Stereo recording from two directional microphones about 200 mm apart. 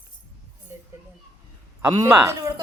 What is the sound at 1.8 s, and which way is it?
Speech, 15° right (ahead or behind).